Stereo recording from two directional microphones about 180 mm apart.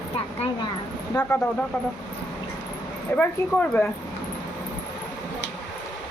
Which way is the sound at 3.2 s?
10° left (ahead or behind).